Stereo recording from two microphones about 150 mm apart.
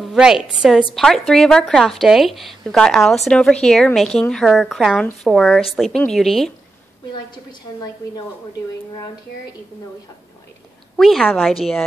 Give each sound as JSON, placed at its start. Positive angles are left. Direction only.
{"t": 0.0, "sound": "speech", "side_deg": -5}
{"t": 7.7, "sound": "a woman's voice", "side_deg": 25}
{"t": 11.0, "sound": "speech", "side_deg": 0}